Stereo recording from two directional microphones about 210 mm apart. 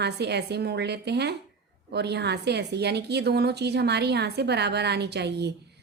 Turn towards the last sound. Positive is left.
turn(degrees=-50)  # may be behind; listen again after turning